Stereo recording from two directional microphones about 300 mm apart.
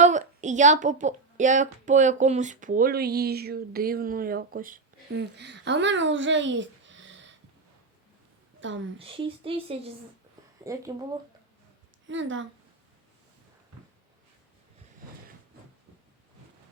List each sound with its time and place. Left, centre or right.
0.0 s a woman's voice: right
8.6 s a woman's voice: right
9.0 s speech: centre
12.0 s a woman's voice: right